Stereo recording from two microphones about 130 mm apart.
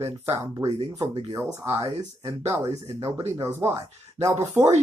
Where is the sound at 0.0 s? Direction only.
25° right (ahead or behind).